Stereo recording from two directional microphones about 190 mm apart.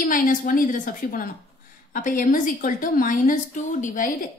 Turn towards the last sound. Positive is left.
turn(degrees=45)  # may be behind; listen again after turning